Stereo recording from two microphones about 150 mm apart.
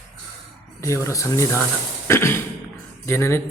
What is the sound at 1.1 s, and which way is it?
Speech, 20° left (ahead or behind).